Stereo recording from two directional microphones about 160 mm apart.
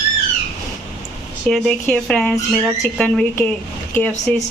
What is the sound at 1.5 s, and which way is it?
Speech, 5° left (ahead or behind).